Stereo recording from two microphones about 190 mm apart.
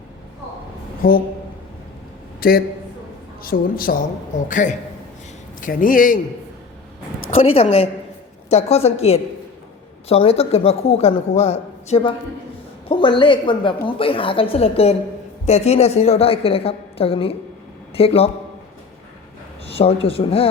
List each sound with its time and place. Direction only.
1.0 s a woman's voice: 50° left (ahead or behind)
2.4 s a woman's voice: 50° left (ahead or behind)
7.3 s a man's voice: 30° left (ahead or behind)
19.6 s a man's voice: 30° left (ahead or behind)